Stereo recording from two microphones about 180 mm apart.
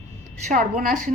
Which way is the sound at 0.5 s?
50° right (ahead or behind).